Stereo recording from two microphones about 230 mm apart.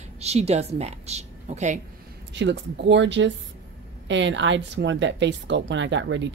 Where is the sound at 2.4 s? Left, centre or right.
Right.